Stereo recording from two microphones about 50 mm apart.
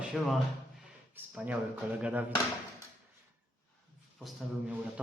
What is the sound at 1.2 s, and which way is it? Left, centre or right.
Speech, right.